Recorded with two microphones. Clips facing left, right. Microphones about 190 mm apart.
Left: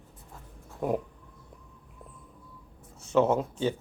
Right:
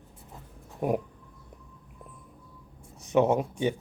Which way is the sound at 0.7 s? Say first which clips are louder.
Right 1 dB; 20° right (ahead or behind).